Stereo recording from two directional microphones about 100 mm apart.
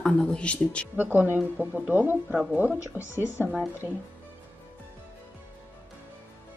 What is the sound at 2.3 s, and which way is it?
Speech, 10° right (ahead or behind).